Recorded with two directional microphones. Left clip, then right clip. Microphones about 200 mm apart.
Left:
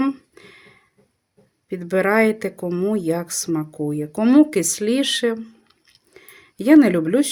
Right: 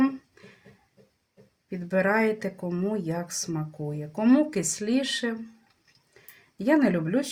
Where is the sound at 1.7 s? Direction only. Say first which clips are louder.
Left 6 dB; 50° left (ahead or behind).